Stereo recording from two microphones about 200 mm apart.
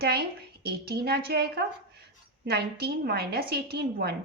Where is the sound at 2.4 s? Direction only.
55° right (ahead or behind).